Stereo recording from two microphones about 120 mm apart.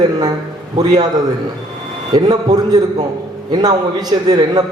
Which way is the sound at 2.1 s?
35° right (ahead or behind).